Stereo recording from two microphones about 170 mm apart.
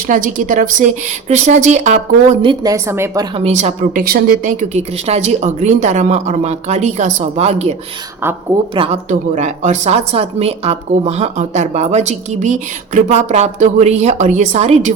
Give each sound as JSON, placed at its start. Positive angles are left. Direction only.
{"t": 0.1, "sound": "speech", "side_deg": -50}
{"t": 2.4, "sound": "speech", "side_deg": -30}
{"t": 2.7, "sound": "speech", "side_deg": -15}
{"t": 3.3, "sound": "speech", "side_deg": -40}
{"t": 4.7, "sound": "a woman's voice", "side_deg": -40}
{"t": 9.0, "sound": "a woman's voice", "side_deg": -45}